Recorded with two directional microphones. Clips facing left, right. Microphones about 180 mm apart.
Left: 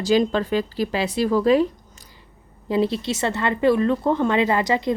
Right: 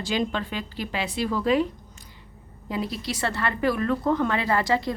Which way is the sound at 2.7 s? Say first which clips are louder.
Left 8 dB; 30° left (ahead or behind).